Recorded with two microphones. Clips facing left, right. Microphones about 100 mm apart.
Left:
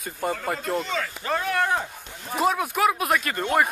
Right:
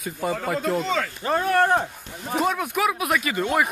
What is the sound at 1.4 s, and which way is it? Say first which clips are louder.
Speech: right 6 dB; 45° right (ahead or behind).